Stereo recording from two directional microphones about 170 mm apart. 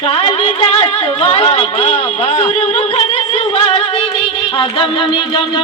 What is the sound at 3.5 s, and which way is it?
Music, 35° left (ahead or behind).